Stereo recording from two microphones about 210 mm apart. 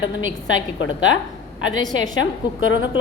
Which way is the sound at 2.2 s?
70° left (ahead or behind).